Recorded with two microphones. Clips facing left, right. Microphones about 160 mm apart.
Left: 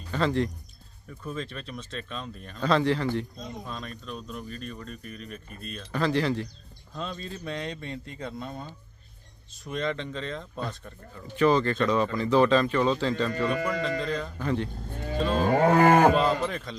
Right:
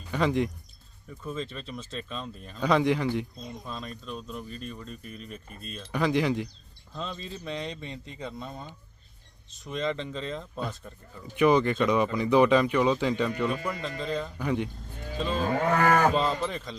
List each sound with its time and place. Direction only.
0.1 s speech: 15° right (ahead or behind)
1.2 s speech: centre (ahead or behind)
2.6 s speech: 15° right (ahead or behind)
3.7 s speech: centre (ahead or behind)
5.9 s speech: 15° right (ahead or behind)
6.9 s speech: centre (ahead or behind)
11.3 s speech: 15° right (ahead or behind)
14.4 s speech: 15° right (ahead or behind)
15.4 s cattle: 45° left (ahead or behind)
15.7 s cattle: 30° left (ahead or behind)
16.1 s speech: centre (ahead or behind)